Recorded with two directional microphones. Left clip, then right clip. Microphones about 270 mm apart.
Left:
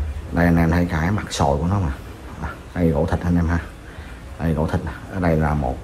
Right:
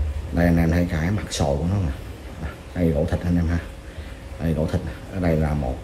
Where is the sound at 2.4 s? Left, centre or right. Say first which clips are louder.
Left 2 dB; centre.